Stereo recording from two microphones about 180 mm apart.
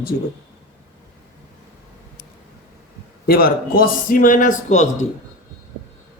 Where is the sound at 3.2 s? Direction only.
55° left (ahead or behind); by 5.0 s 40° left (ahead or behind).